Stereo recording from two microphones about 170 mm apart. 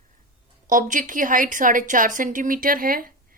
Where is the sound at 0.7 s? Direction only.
50° right (ahead or behind).